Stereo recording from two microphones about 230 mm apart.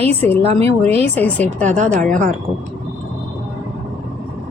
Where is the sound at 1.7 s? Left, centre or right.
Right.